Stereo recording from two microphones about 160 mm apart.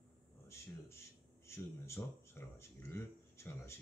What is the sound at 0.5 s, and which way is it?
Speech, 15° left (ahead or behind).